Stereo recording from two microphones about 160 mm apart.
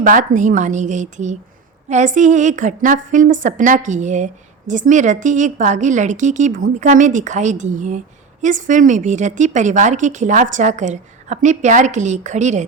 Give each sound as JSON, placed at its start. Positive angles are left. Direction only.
{"t": 0.0, "sound": "a woman's voice", "side_deg": -55}